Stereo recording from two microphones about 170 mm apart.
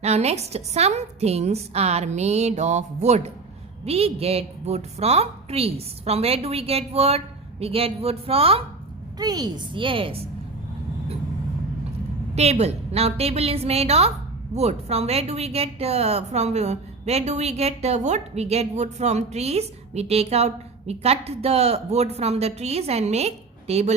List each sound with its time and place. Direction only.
0.0 s a woman's voice: 40° right (ahead or behind)
9.1 s a woman's voice: 20° right (ahead or behind)
12.3 s a woman's voice: 40° right (ahead or behind)